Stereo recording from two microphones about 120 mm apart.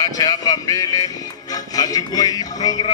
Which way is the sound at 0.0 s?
30° left (ahead or behind).